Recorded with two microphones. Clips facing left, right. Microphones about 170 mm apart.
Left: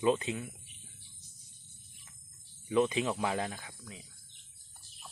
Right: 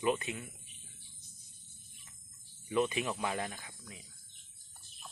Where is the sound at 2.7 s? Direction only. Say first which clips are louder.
Left 3 dB; 20° left (ahead or behind).